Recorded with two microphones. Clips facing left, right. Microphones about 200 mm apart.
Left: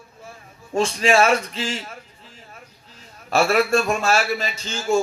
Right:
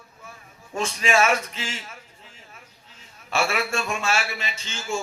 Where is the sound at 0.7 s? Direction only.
35° left (ahead or behind).